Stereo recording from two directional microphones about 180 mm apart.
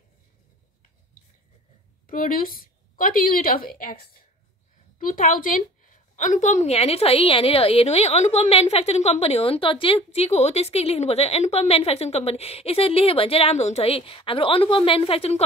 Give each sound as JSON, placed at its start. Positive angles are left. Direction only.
{"t": 2.0, "sound": "a woman's voice", "side_deg": 50}